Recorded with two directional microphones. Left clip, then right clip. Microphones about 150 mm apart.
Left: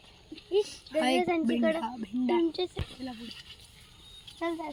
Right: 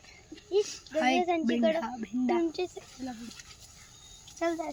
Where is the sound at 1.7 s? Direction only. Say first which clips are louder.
Right 1 dB; 25° left (ahead or behind).